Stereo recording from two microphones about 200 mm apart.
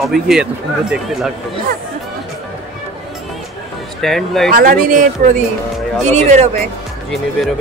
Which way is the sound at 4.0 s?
Centre (ahead or behind).